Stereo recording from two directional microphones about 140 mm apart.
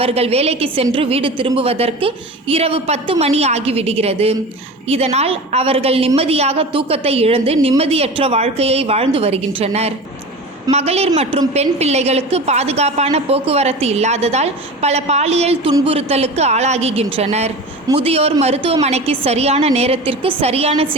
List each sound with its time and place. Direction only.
0.0 s a woman's voice: 45° right (ahead or behind)